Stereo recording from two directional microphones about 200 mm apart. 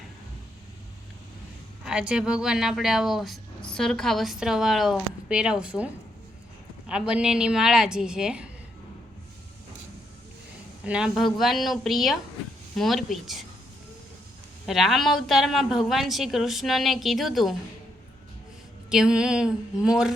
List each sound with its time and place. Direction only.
1.8 s speech: 5° right (ahead or behind)
10.8 s speech: 5° right (ahead or behind)
14.7 s speech: centre (ahead or behind)
18.9 s speech: 5° right (ahead or behind)